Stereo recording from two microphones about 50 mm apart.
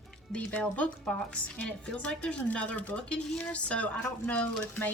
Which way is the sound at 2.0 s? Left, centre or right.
Left.